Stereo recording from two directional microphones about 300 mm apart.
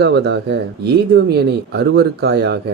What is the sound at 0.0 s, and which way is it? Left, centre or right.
Speech, right.